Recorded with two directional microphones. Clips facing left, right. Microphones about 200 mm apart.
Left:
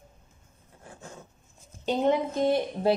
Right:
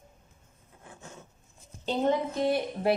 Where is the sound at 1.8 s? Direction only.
20° left (ahead or behind).